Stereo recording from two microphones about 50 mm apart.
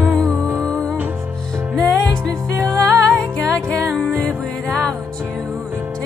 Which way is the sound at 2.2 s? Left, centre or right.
Centre.